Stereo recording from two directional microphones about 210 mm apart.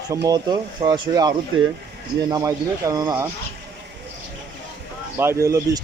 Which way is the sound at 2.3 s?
15° right (ahead or behind).